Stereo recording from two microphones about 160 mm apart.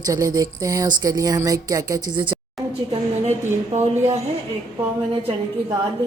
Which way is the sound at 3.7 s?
45° right (ahead or behind).